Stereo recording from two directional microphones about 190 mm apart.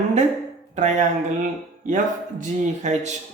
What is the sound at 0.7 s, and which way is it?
Speech, 40° right (ahead or behind).